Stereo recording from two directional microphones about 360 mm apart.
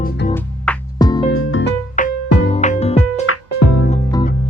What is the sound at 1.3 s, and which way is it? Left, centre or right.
Music, left.